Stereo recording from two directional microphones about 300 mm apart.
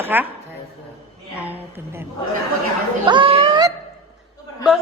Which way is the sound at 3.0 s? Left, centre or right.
Centre.